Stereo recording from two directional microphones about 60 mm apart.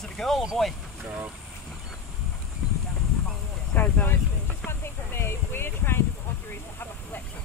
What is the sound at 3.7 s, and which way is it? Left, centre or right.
Speech, left.